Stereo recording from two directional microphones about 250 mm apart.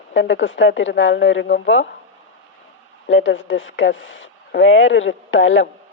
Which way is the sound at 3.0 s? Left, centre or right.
Left.